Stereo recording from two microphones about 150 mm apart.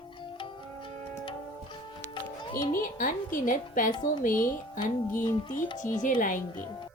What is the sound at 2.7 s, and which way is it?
A woman's voice, 65° left (ahead or behind).